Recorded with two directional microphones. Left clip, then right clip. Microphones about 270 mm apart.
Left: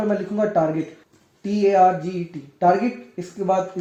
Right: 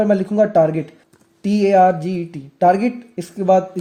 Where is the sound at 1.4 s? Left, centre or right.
Right.